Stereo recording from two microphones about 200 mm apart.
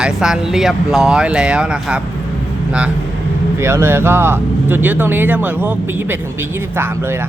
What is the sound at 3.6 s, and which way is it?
Speech, 10° right (ahead or behind).